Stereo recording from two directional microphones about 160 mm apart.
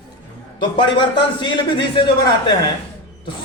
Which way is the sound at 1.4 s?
30° left (ahead or behind).